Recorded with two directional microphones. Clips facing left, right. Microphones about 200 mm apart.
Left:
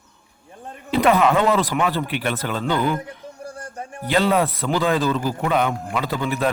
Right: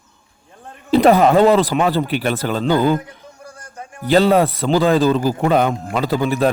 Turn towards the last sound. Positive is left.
turn(degrees=-35)  # may be behind; listen again after turning